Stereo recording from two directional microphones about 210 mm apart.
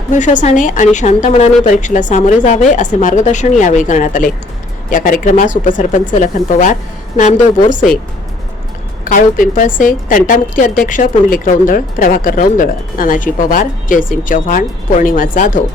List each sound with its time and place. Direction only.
0.1 s a woman's voice: 35° left (ahead or behind)
9.0 s a woman's voice: 40° left (ahead or behind)